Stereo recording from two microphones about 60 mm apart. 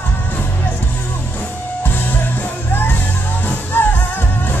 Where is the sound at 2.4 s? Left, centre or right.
Left.